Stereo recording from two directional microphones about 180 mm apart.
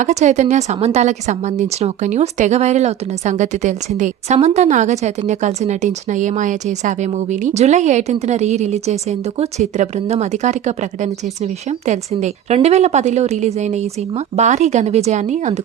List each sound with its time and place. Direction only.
0.0 s a woman's voice: 40° right (ahead or behind)